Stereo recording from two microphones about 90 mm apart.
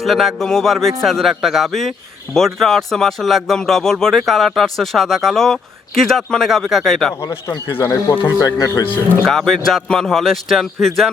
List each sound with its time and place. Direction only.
0.0 s speech: centre (ahead or behind)
7.2 s a man's voice: 35° left (ahead or behind)
8.4 s a man's voice: 40° left (ahead or behind)
9.2 s speech: 5° left (ahead or behind)